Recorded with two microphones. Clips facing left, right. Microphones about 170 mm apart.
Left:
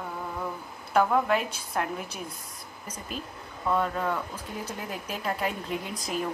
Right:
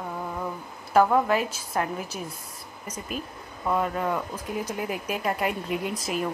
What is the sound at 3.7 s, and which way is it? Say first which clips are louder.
Speech: right 2 dB; 10° right (ahead or behind).